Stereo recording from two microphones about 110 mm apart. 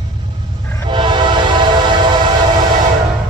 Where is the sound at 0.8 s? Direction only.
45° right (ahead or behind).